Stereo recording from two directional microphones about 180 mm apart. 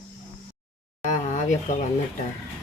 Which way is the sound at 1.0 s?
45° left (ahead or behind).